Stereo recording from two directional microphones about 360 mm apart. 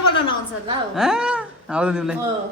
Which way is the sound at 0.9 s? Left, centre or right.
Centre.